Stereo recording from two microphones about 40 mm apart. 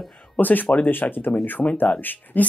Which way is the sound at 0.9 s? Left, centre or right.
Left.